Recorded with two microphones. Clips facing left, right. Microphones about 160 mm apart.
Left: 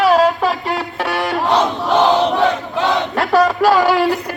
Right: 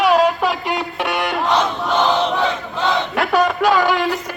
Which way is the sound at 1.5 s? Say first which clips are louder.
Left 4 dB; 40° left (ahead or behind).